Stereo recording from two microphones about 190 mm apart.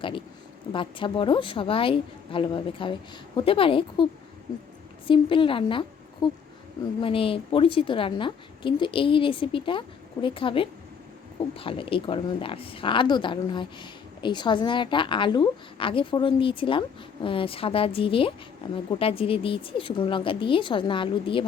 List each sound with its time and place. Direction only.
0.7 s a woman's voice: 25° left (ahead or behind)
5.0 s a woman's voice: 25° left (ahead or behind)